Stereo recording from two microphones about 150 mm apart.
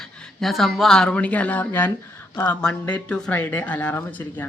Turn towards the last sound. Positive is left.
turn(degrees=10)  # may be behind; listen again after turning